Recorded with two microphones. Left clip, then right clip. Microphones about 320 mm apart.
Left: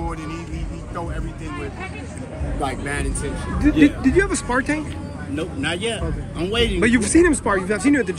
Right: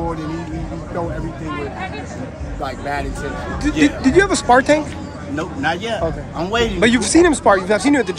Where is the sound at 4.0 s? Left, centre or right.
Centre.